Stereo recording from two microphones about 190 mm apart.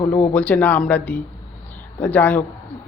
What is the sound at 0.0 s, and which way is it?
A man's voice, 15° left (ahead or behind).